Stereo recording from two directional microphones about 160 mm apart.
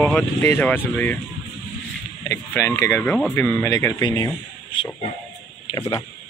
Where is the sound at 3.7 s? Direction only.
20° left (ahead or behind).